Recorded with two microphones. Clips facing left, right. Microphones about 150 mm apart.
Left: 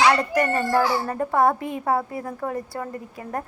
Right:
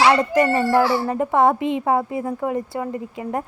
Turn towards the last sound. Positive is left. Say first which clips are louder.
# right 5 dB
turn(degrees=-15)  # may be behind; listen again after turning